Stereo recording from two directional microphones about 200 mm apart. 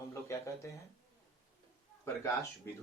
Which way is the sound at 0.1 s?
15° left (ahead or behind).